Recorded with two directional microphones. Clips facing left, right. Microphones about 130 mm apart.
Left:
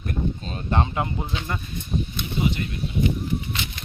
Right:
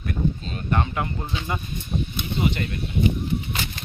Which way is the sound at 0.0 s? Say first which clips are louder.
Right 2 dB; 35° left (ahead or behind).